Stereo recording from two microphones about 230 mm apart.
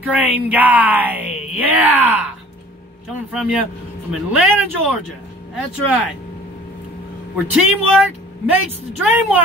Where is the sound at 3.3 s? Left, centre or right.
Centre.